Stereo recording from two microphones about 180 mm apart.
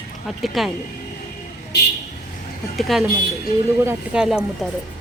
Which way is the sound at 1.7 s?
65° left (ahead or behind).